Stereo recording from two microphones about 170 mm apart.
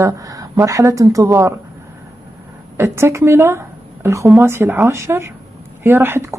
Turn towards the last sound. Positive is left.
turn(degrees=-15)  # may be behind; listen again after turning